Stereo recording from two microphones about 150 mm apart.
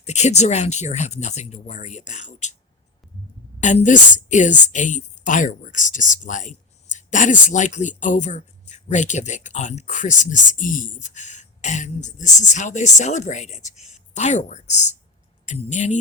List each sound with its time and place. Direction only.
0.0 s a woman's voice: 50° left (ahead or behind)
3.6 s a woman's voice: 55° left (ahead or behind)